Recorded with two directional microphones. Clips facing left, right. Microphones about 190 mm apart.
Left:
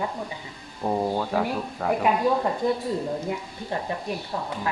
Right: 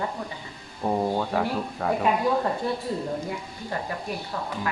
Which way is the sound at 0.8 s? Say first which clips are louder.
Even; centre (ahead or behind).